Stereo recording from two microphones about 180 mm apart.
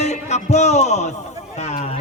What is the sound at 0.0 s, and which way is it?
Music, 40° left (ahead or behind).